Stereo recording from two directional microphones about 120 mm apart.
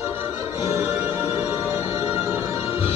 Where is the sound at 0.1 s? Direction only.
20° right (ahead or behind).